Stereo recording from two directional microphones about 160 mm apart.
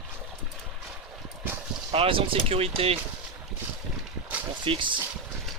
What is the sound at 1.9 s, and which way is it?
Speech, 35° right (ahead or behind).